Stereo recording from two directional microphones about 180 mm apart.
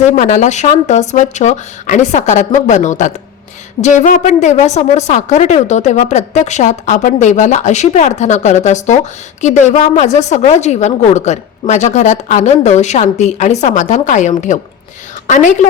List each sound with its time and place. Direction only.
0.2 s a woman's voice: 45° left (ahead or behind)